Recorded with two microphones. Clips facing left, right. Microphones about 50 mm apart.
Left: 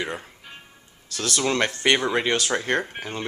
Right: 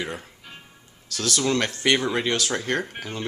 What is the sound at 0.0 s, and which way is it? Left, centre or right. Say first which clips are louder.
Speech: left 2 dB; centre.